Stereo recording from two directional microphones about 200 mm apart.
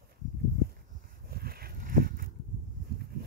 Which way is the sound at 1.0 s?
50° right (ahead or behind).